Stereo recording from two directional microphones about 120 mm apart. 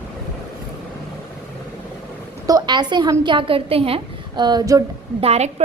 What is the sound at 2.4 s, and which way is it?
A woman's voice, 35° right (ahead or behind).